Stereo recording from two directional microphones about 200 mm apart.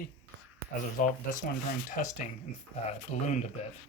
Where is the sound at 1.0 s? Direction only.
40° left (ahead or behind).